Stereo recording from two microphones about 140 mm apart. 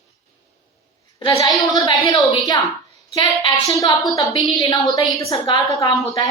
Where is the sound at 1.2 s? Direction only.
45° left (ahead or behind).